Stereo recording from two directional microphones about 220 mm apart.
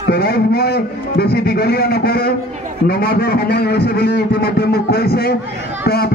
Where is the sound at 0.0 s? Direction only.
45° left (ahead or behind).